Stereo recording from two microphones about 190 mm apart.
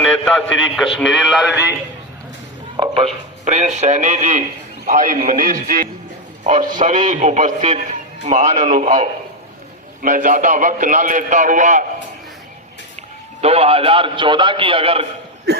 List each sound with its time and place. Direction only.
0.0 s a man's voice: 5° left (ahead or behind)
2.7 s a man's voice: 30° right (ahead or behind)
13.4 s a man's voice: 30° right (ahead or behind)
15.5 s a sound: 60° right (ahead or behind)